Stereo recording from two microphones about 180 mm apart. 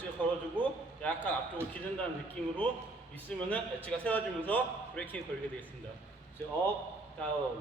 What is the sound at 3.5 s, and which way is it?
A man's voice, 10° left (ahead or behind).